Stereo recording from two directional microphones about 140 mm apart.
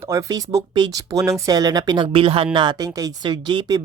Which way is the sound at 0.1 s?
25° right (ahead or behind).